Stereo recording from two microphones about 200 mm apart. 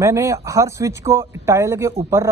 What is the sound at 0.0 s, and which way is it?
Speech, 15° right (ahead or behind).